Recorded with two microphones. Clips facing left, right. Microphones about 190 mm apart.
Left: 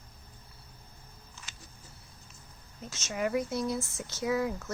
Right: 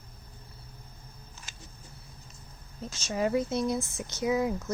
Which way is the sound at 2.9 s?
30° right (ahead or behind).